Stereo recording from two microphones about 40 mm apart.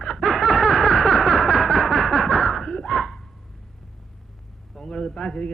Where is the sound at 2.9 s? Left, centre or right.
Centre.